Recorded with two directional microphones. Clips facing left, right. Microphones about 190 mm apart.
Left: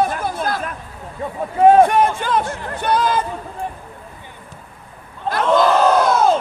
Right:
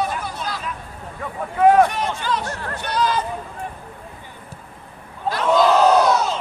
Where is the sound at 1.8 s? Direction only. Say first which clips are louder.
Left 7 dB; 55° left (ahead or behind).